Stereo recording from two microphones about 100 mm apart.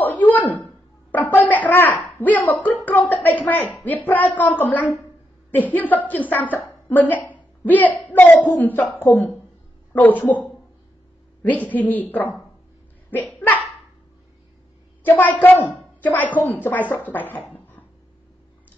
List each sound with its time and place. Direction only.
0.0 s a sound: 15° left (ahead or behind)
2.1 s a woman's voice: 20° left (ahead or behind)
11.4 s a woman's voice: 15° left (ahead or behind)
15.0 s a woman's voice: 15° left (ahead or behind)
17.5 s cough: 20° left (ahead or behind)